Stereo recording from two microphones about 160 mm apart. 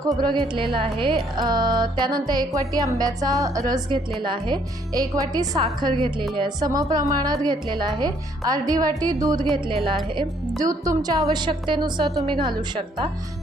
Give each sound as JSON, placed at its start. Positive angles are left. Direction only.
{"t": 0.1, "sound": "a woman's voice", "side_deg": -25}
{"t": 10.6, "sound": "speech", "side_deg": -20}